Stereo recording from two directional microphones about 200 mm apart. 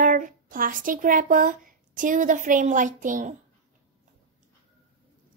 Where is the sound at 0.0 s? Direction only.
40° right (ahead or behind).